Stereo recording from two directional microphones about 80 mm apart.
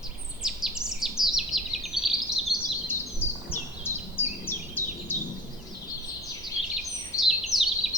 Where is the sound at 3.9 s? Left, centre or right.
Left.